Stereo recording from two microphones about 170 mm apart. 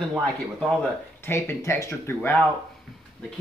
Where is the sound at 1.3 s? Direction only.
15° left (ahead or behind).